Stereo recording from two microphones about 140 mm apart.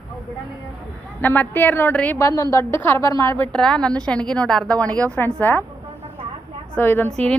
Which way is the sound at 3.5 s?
5° left (ahead or behind).